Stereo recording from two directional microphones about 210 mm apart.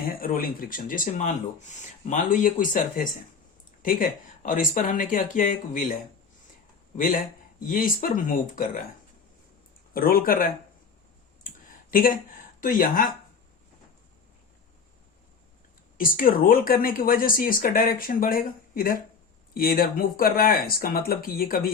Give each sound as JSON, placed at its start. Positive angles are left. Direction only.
{"t": 0.2, "sound": "speech", "side_deg": 45}
{"t": 9.9, "sound": "speech", "side_deg": 45}
{"t": 11.4, "sound": "a sound", "side_deg": 40}
{"t": 12.5, "sound": "speech", "side_deg": 40}
{"t": 16.0, "sound": "speech", "side_deg": 40}